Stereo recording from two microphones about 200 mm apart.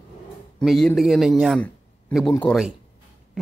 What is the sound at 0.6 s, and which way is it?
A man's voice, 5° left (ahead or behind).